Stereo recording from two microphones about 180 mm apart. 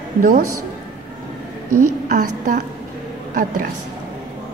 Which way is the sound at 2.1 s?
45° right (ahead or behind).